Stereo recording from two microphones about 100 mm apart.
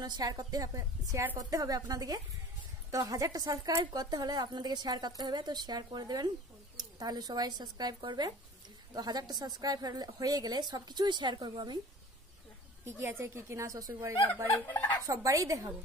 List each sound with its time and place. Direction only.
0.0 s a woman's voice: 45° right (ahead or behind)
12.8 s a woman's voice: 25° right (ahead or behind)
14.5 s speech: 20° left (ahead or behind)
15.0 s a woman's voice: 35° right (ahead or behind)